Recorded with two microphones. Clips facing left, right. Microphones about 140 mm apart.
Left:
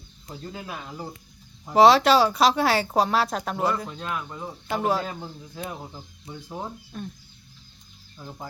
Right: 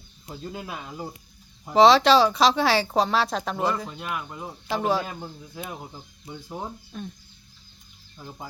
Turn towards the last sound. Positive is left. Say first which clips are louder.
# even
turn(degrees=0)  # may be behind; listen again after turning